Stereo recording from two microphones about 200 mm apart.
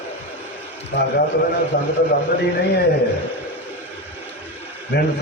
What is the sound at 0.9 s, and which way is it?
Speech, 60° left (ahead or behind).